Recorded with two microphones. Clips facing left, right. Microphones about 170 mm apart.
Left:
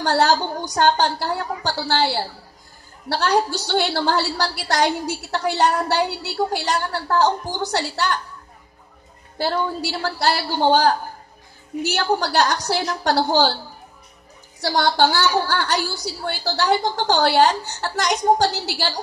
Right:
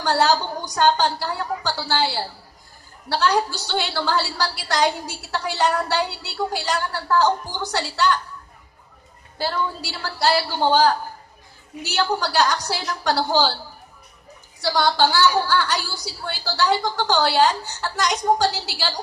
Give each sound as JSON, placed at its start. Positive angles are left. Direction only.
{"t": 0.7, "sound": "a woman's voice", "side_deg": 55}
{"t": 3.1, "sound": "a woman's voice", "side_deg": 50}
{"t": 9.4, "sound": "a woman's voice", "side_deg": 55}
{"t": 14.6, "sound": "a woman's voice", "side_deg": 50}